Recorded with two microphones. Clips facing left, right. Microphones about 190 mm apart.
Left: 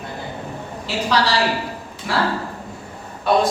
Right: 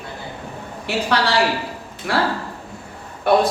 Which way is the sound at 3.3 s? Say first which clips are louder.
Right 2 dB; 60° right (ahead or behind).